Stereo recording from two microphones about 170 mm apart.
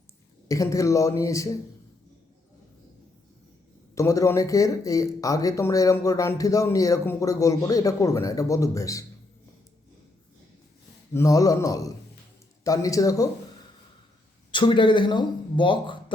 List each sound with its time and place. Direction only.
0.4 s speech: 20° left (ahead or behind)
3.9 s speech: 20° left (ahead or behind)
11.1 s speech: 20° left (ahead or behind)
14.5 s speech: 30° left (ahead or behind)